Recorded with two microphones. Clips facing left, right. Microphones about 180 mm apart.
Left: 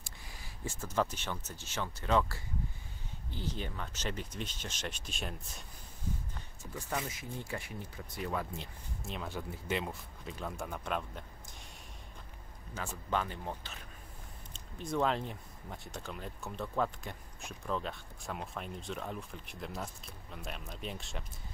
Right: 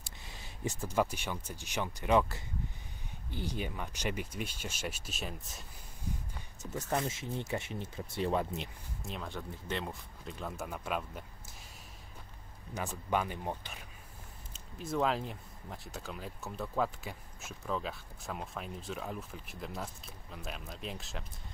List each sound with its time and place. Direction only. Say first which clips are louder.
0.3 s speech: right 5 dB; 20° right (ahead or behind); by 5.7 s centre (ahead or behind)
7.1 s speech: right 4 dB; 25° right (ahead or behind)
9.0 s speech: left 1 dB; 5° left (ahead or behind)
12.7 s speech: right 2 dB; 15° right (ahead or behind)
14.5 s speech: even; 5° right (ahead or behind)